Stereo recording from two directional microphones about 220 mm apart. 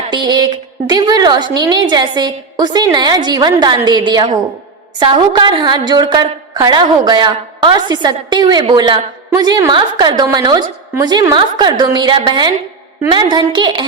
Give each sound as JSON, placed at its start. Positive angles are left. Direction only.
{"t": 0.1, "sound": "a woman's voice", "side_deg": -20}